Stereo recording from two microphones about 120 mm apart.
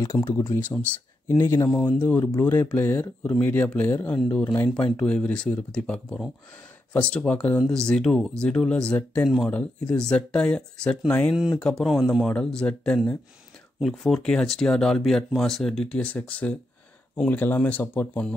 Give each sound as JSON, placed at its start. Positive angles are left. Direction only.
{"t": 0.0, "sound": "speech", "side_deg": 25}
{"t": 1.7, "sound": "speech", "side_deg": 5}
{"t": 11.3, "sound": "speech", "side_deg": -5}